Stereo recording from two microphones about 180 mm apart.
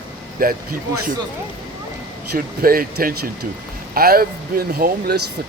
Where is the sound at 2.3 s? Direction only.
55° right (ahead or behind).